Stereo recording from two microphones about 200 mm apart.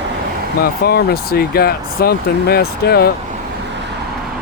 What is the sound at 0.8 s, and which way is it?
Speech, 50° left (ahead or behind).